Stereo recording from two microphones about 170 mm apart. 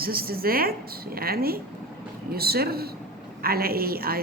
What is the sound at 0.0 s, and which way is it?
A woman's voice, 60° right (ahead or behind).